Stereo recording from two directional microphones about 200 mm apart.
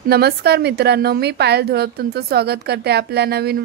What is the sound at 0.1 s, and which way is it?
A woman's voice, 55° right (ahead or behind).